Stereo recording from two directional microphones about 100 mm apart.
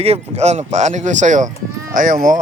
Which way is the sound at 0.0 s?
90° right.